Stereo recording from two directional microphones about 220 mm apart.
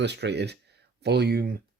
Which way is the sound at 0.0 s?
50° right (ahead or behind).